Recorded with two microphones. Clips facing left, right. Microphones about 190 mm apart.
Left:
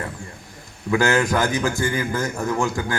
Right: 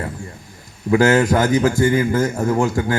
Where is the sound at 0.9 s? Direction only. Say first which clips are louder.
Right 5 dB; 25° right (ahead or behind).